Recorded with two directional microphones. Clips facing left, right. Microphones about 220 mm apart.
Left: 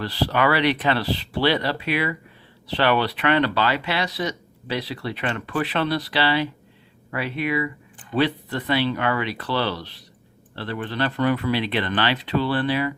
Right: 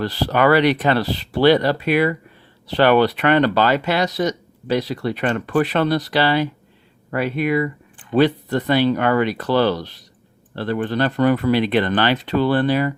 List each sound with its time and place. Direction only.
0.0 s speech: 45° right (ahead or behind)